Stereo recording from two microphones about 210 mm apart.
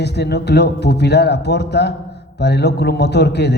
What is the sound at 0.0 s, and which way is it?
A woman's voice, 55° left (ahead or behind).